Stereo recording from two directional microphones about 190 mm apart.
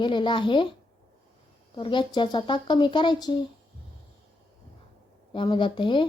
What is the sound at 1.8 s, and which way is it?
A woman's voice, 25° left (ahead or behind).